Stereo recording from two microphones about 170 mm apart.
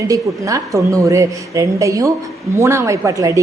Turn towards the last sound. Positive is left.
turn(degrees=-20)  # may be behind; listen again after turning